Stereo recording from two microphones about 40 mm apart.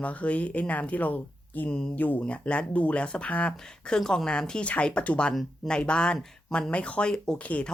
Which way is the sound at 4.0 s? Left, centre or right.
Centre.